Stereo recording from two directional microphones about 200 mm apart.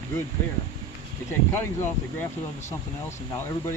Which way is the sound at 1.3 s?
10° left (ahead or behind).